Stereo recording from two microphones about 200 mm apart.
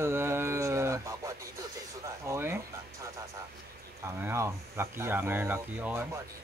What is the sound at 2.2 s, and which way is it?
Speech, 15° right (ahead or behind).